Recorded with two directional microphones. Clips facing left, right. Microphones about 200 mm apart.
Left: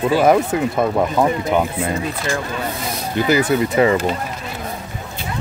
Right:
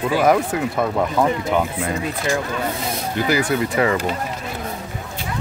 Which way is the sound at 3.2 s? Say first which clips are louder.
Left 4 dB; 20° left (ahead or behind).